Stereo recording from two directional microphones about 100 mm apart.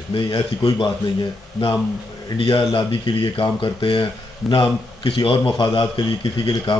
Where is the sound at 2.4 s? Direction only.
65° left (ahead or behind).